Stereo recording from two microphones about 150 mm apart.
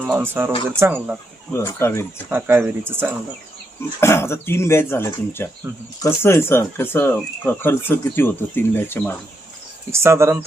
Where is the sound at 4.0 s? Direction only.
15° left (ahead or behind).